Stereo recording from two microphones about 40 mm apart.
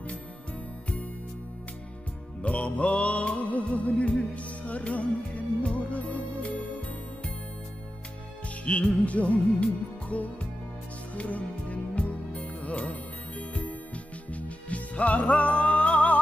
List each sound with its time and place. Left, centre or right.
2.4 s music: left
8.7 s music: left